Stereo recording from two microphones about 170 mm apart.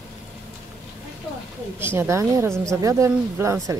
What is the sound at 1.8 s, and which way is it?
Speech, 15° right (ahead or behind).